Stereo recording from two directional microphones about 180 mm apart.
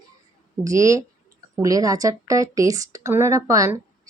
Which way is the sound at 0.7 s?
15° right (ahead or behind).